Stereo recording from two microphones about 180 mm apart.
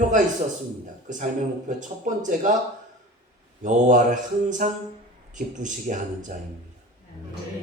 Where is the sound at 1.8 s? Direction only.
45° right (ahead or behind).